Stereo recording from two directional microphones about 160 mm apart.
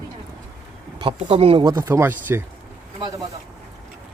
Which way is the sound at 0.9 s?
35° right (ahead or behind).